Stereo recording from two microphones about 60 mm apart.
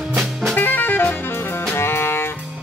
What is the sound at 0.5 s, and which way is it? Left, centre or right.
Music, left.